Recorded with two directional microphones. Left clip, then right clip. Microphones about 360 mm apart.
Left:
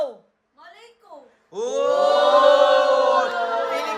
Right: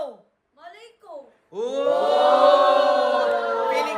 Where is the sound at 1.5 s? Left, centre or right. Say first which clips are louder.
Left 1 dB; centre.